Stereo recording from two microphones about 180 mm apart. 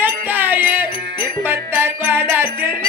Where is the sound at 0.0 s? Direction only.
10° right (ahead or behind).